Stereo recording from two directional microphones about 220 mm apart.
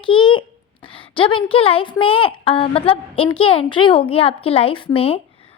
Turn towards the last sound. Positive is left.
turn(degrees=25)  # may be behind; listen again after turning